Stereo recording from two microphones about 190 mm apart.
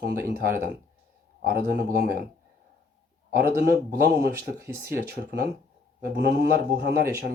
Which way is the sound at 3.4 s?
55° right (ahead or behind).